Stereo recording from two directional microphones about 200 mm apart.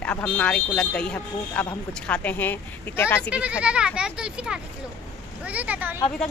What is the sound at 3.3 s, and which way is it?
Speech, 5° right (ahead or behind).